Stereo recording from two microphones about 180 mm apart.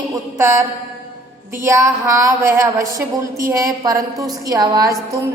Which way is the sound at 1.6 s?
15° right (ahead or behind).